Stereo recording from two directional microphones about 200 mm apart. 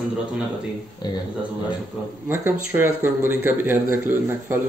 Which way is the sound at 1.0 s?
20° left (ahead or behind).